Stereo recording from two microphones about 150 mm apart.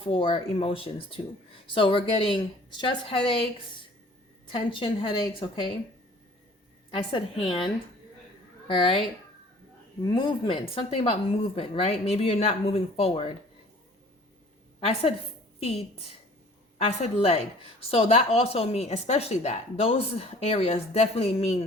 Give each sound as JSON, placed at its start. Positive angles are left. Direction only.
{"t": 0.0, "sound": "speech", "side_deg": 35}
{"t": 4.5, "sound": "speech", "side_deg": 35}
{"t": 6.9, "sound": "a woman's voice", "side_deg": 35}
{"t": 10.0, "sound": "speech", "side_deg": 35}
{"t": 14.8, "sound": "speech", "side_deg": 40}